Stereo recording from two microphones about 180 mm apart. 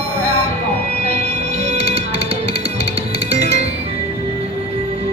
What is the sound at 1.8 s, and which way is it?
Music, 35° right (ahead or behind).